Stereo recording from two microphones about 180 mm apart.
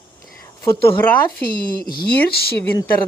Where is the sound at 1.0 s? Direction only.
10° left (ahead or behind).